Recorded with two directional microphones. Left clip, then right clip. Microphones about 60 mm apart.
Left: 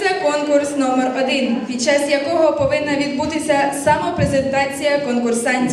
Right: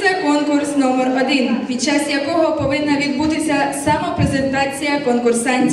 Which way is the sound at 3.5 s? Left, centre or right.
Left.